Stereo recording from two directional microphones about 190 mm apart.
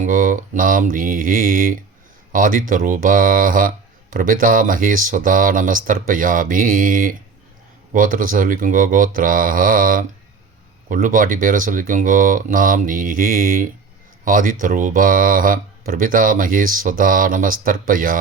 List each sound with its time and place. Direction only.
0.0 s speech: 45° right (ahead or behind)